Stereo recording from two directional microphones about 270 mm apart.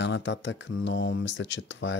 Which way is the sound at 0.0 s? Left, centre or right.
Left.